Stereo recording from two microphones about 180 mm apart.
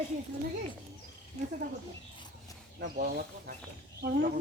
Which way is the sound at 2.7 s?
50° right (ahead or behind).